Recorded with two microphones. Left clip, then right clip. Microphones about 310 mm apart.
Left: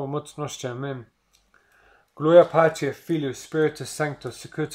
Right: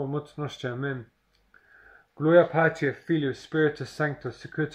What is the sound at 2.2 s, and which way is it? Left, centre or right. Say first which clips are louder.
Speech: left 5 dB; left.